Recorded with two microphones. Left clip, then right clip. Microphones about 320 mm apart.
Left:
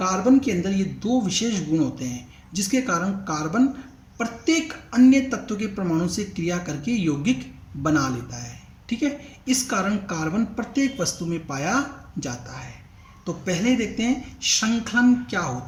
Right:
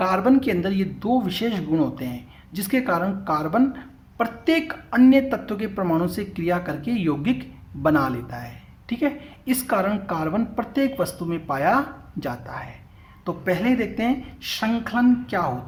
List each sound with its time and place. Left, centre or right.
0.0 s speech: right